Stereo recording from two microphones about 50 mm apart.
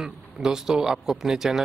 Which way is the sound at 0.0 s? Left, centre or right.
Centre.